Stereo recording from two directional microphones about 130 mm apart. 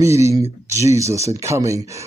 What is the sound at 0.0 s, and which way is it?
A man's voice, 20° right (ahead or behind).